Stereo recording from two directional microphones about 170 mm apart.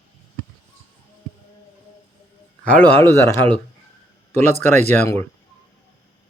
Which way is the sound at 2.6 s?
10° left (ahead or behind).